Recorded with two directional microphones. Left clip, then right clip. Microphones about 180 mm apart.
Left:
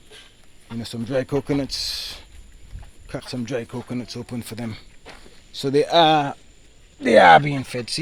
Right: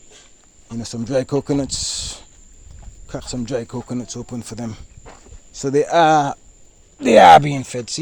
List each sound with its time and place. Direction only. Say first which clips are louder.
0.7 s speech: right 4 dB; 20° right (ahead or behind)
5.6 s speech: right 2 dB; centre (ahead or behind)
7.0 s speech: right 4 dB; 20° right (ahead or behind)